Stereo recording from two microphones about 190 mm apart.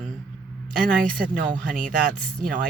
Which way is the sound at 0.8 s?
50° right (ahead or behind).